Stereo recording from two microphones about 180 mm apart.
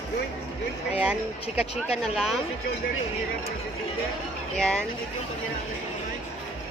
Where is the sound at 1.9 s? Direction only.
Centre (ahead or behind).